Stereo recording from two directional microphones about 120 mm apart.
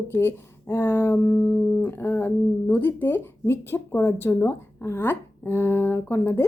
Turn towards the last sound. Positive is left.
turn(degrees=20)  # may be behind; listen again after turning